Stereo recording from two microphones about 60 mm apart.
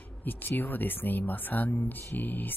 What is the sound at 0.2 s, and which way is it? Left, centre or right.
Speech, left.